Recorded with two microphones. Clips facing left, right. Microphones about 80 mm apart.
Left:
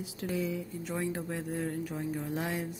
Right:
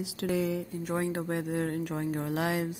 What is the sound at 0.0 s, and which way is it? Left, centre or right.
Speech, right.